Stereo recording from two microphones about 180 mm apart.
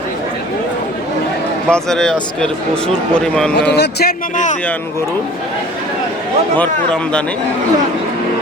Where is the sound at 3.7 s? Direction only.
65° left (ahead or behind); by 4.6 s 45° left (ahead or behind).